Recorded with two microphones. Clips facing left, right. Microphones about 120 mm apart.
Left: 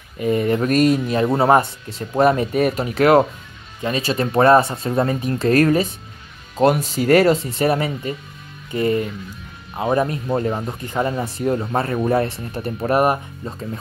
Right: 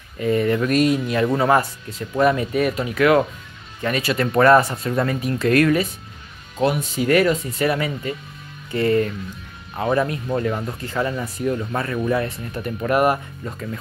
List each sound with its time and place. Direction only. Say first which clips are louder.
0.2 s speech: left 1 dB; 20° left (ahead or behind)
0.6 s speech: left 2 dB; 45° left (ahead or behind)
1.0 s speech: left 2 dB; 30° left (ahead or behind)